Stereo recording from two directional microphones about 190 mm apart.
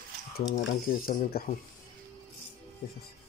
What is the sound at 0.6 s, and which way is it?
Speech, 55° left (ahead or behind).